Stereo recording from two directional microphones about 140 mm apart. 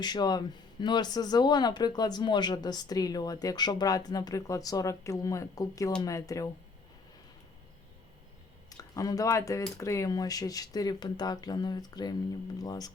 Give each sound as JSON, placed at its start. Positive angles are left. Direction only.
{"t": 0.0, "sound": "speech", "side_deg": 30}
{"t": 8.7, "sound": "speech", "side_deg": 25}